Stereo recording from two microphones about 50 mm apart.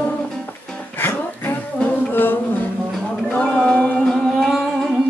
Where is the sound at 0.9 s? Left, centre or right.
Left.